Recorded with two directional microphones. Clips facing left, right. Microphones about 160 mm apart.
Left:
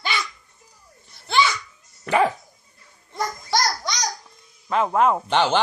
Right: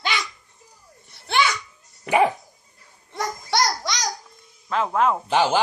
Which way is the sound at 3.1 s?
80° right.